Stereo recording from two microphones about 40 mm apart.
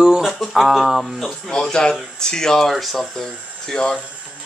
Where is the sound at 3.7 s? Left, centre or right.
Centre.